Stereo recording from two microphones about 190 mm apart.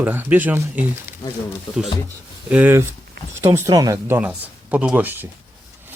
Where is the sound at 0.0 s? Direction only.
10° right (ahead or behind).